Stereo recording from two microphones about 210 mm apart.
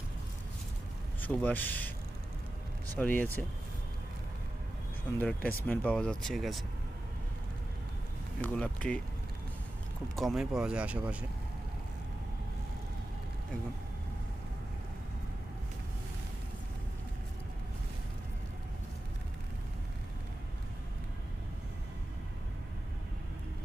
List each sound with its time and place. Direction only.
1.2 s speech: 5° left (ahead or behind)
2.9 s speech: 5° left (ahead or behind)
5.1 s speech: 5° left (ahead or behind)
8.4 s speech: 5° left (ahead or behind)
10.2 s speech: centre (ahead or behind)